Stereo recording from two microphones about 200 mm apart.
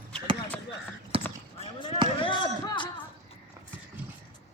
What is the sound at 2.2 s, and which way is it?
Chop, 25° left (ahead or behind).